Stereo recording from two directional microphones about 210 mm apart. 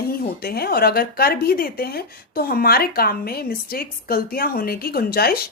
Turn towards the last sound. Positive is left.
turn(degrees=45)  # may be behind; listen again after turning